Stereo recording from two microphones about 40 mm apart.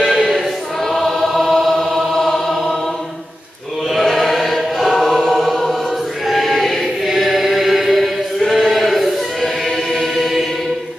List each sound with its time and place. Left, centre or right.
0.0 s choir: centre
2.1 s chant: centre
3.9 s choir: centre
10.1 s chant: centre